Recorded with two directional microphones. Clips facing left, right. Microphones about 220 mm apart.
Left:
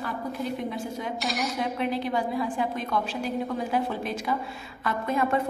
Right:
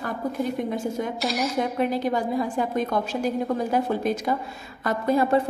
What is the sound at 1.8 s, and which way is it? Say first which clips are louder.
A woman's voice: right 3 dB; 45° right (ahead or behind).